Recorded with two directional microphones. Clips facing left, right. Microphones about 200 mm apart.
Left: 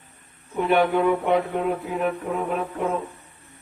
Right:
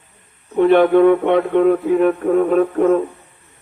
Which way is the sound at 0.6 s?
55° right (ahead or behind).